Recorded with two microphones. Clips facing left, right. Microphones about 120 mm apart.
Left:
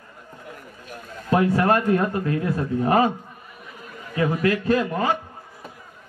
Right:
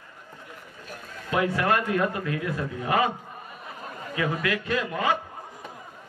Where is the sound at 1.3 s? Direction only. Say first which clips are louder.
Left 5 dB; 35° left (ahead or behind).